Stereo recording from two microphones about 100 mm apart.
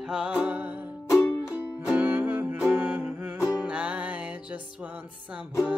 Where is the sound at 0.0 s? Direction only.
10° right (ahead or behind).